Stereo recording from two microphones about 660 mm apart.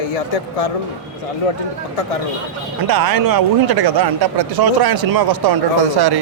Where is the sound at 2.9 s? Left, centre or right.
Right.